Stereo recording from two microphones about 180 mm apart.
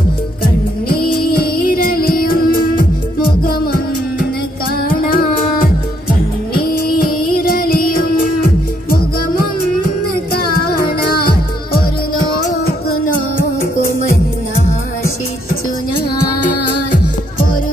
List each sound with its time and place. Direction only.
0.8 s music: 55° left (ahead or behind)
4.8 s music: 55° left (ahead or behind)
6.5 s music: 55° left (ahead or behind)